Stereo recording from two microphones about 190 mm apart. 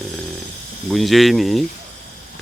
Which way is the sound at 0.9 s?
Centre (ahead or behind).